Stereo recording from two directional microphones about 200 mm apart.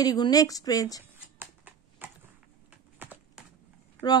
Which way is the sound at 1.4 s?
10° right (ahead or behind).